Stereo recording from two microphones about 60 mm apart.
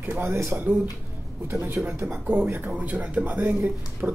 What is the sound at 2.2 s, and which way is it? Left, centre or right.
Speech, right.